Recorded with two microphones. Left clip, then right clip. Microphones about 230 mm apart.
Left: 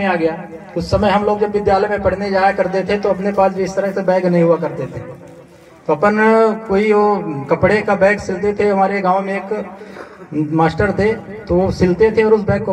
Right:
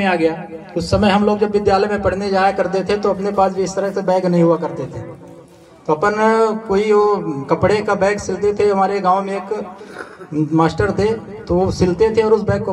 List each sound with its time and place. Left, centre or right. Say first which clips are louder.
0.0 s a man's voice: even; right
5.9 s a man's voice: left 2 dB; right